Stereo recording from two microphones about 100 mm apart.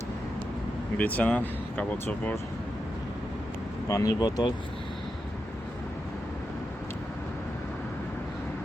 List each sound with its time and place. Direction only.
0.9 s speech: 15° left (ahead or behind)
3.8 s speech: 35° left (ahead or behind)